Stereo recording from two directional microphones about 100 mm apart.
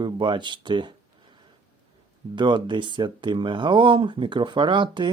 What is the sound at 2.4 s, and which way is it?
Speech, 50° right (ahead or behind).